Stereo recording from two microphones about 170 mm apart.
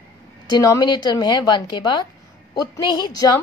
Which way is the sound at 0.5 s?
20° left (ahead or behind).